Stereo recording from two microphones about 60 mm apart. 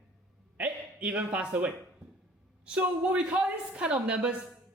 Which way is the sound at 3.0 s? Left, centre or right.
Centre.